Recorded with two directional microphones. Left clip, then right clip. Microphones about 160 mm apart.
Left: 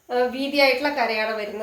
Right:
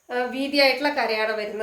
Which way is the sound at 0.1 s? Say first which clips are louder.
Left 3 dB; 15° right (ahead or behind).